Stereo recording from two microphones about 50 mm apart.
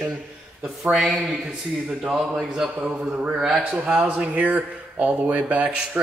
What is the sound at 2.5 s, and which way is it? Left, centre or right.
Speech, centre.